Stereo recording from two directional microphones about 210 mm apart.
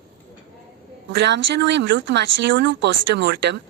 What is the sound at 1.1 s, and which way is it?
Speech, 55° right (ahead or behind).